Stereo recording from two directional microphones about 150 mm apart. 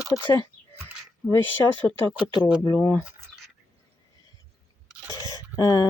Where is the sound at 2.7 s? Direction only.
10° left (ahead or behind).